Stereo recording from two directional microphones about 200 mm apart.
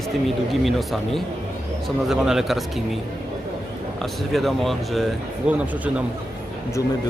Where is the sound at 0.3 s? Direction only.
Centre (ahead or behind).